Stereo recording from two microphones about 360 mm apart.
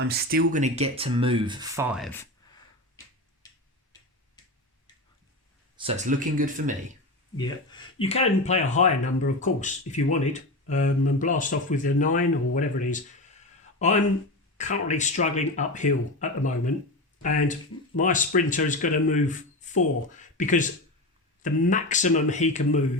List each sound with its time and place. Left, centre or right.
0.1 s speech: right; by 2.2 s centre
5.7 s speech: centre
7.3 s speech: centre